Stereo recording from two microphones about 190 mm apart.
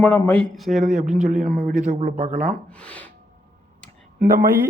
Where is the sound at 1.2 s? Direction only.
40° right (ahead or behind).